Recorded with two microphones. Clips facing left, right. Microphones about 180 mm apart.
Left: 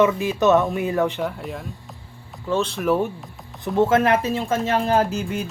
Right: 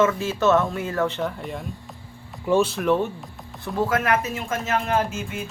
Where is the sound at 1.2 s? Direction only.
Centre (ahead or behind).